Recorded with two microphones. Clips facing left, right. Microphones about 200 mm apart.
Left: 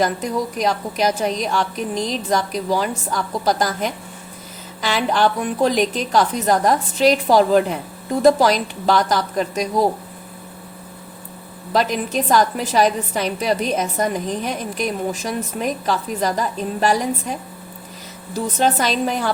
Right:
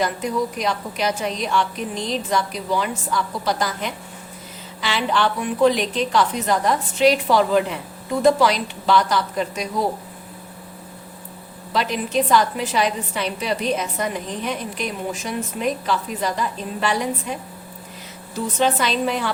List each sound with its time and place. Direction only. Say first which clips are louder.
0.0 s a woman's voice: left 2 dB; 40° left (ahead or behind)
11.7 s a woman's voice: left 2 dB; 45° left (ahead or behind)
18.6 s a woman's voice: left 1 dB; 45° left (ahead or behind)